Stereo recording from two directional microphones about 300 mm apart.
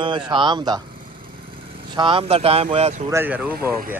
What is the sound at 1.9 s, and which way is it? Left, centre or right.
Speech, centre.